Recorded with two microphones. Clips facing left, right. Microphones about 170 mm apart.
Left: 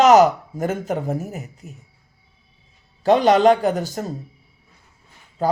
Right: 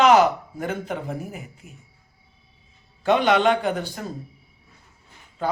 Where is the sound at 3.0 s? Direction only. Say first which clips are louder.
Left 5 dB; 35° left (ahead or behind).